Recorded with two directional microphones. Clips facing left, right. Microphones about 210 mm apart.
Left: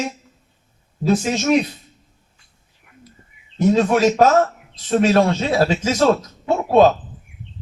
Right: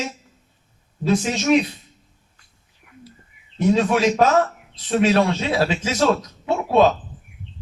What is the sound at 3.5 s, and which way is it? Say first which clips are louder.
A man's voice: left 2 dB; 45° left (ahead or behind).